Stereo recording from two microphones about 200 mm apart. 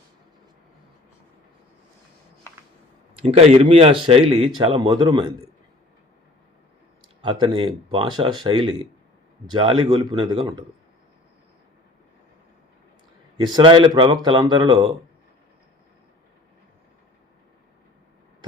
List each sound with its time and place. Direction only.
3.2 s speech: 30° right (ahead or behind)
7.0 s speech: 25° right (ahead or behind)
13.3 s speech: 25° right (ahead or behind)